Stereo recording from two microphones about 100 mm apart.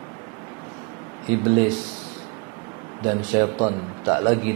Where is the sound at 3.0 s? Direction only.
25° right (ahead or behind).